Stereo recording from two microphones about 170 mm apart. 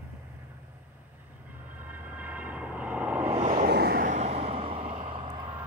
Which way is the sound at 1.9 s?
10° right (ahead or behind).